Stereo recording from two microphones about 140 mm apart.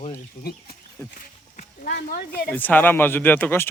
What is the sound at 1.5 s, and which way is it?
Speech, 90° left.